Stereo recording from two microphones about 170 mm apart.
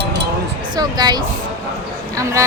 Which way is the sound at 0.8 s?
25° right (ahead or behind).